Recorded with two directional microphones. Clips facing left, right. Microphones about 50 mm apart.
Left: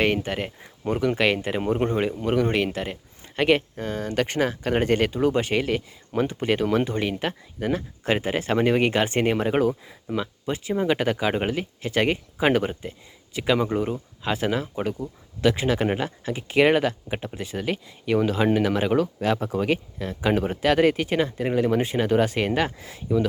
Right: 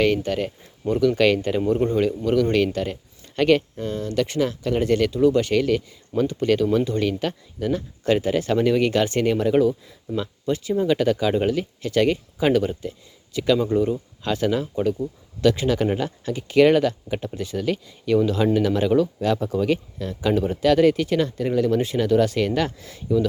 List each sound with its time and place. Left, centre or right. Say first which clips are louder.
0.0 s speech: right 3 dB; left
2.7 s speech: right 4 dB; centre; by 9.6 s left
10.2 s speech: right 3 dB; centre
13.3 s speech: right 3 dB; left
13.6 s speech: right 3 dB; left
14.2 s speech: right 2 dB; centre